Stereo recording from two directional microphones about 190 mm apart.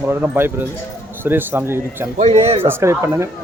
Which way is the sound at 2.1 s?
35° right (ahead or behind).